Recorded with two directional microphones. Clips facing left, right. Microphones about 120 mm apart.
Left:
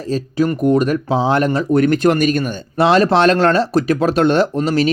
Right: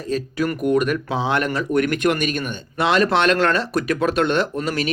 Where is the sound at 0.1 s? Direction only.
30° left (ahead or behind).